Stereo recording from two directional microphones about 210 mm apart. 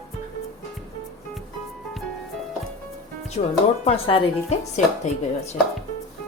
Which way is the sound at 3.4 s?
30° left (ahead or behind).